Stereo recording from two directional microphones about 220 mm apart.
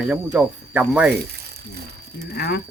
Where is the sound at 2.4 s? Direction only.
45° left (ahead or behind).